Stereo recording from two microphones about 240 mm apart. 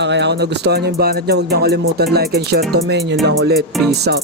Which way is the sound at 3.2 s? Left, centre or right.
Right.